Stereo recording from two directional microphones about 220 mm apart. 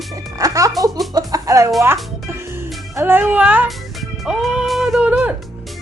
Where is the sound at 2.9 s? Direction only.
10° right (ahead or behind).